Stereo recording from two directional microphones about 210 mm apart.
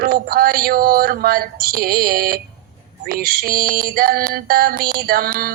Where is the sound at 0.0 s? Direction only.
45° right (ahead or behind).